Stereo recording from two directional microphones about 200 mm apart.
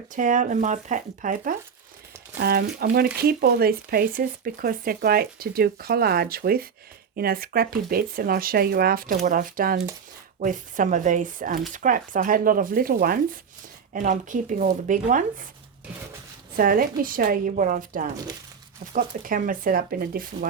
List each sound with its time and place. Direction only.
0.1 s speech: 40° right (ahead or behind)
2.4 s speech: 50° right (ahead or behind)
16.6 s speech: 45° right (ahead or behind)